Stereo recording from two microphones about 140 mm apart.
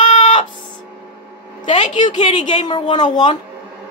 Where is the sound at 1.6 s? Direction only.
60° left (ahead or behind).